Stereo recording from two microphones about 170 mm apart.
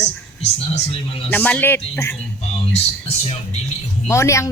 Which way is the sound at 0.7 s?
35° left (ahead or behind).